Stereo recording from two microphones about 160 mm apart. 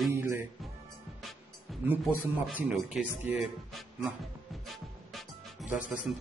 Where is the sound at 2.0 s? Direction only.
5° right (ahead or behind).